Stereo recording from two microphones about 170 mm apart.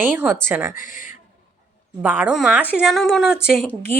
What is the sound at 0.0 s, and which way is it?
Speech, 10° right (ahead or behind).